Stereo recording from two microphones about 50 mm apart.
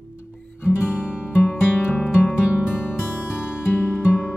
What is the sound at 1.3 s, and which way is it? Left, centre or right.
Music, left.